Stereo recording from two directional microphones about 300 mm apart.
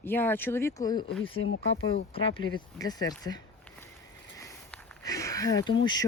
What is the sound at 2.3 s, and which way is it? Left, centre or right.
Speech, centre.